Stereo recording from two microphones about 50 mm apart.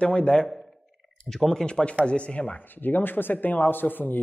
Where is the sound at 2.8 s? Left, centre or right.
Left.